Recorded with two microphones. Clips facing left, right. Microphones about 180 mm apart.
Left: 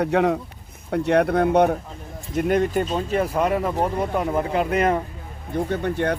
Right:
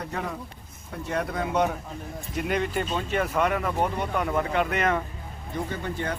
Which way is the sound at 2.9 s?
35° left (ahead or behind).